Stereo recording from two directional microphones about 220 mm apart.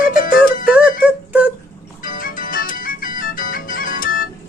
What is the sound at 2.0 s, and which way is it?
Music, 40° left (ahead or behind).